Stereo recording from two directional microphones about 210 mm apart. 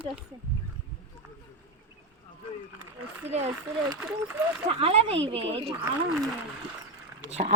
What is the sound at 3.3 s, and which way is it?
Speech, 30° right (ahead or behind).